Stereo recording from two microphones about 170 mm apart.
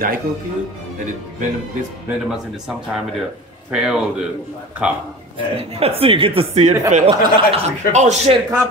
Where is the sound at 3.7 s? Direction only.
5° right (ahead or behind).